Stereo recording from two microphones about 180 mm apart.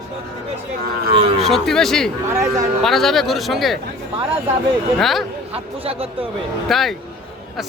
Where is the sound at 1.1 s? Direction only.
30° right (ahead or behind).